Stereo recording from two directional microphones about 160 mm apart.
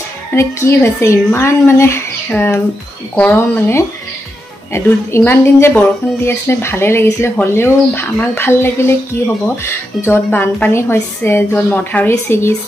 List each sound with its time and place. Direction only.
0.3 s speech: 15° left (ahead or behind)